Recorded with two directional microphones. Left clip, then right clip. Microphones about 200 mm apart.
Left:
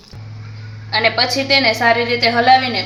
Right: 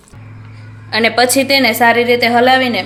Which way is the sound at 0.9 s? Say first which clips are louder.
Right 3 dB; 45° right (ahead or behind).